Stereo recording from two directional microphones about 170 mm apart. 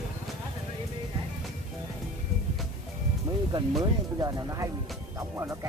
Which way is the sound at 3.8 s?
20° right (ahead or behind).